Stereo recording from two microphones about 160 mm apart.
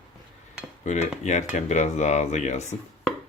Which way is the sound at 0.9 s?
45° left (ahead or behind).